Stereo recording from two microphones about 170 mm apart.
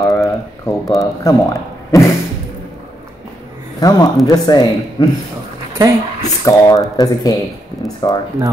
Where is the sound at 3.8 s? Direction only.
20° left (ahead or behind).